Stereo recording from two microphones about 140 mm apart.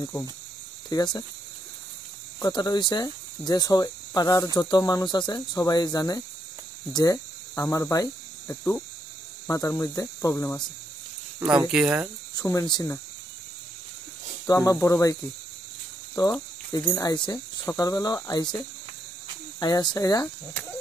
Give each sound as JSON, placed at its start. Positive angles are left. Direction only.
{"t": 0.0, "sound": "speech", "side_deg": 20}
{"t": 2.4, "sound": "speech", "side_deg": 25}
{"t": 6.9, "sound": "cricket", "side_deg": 25}
{"t": 9.5, "sound": "speech", "side_deg": 20}
{"t": 11.3, "sound": "speech", "side_deg": -10}
{"t": 12.4, "sound": "speech", "side_deg": 25}
{"t": 14.5, "sound": "speech", "side_deg": 25}
{"t": 16.2, "sound": "speech", "side_deg": 25}
{"t": 19.6, "sound": "speech", "side_deg": 30}